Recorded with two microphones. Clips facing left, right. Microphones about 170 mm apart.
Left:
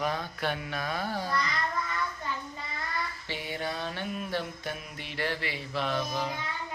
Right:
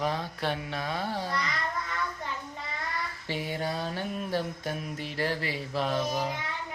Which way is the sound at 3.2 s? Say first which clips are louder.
Right 6 dB; 40° right (ahead or behind).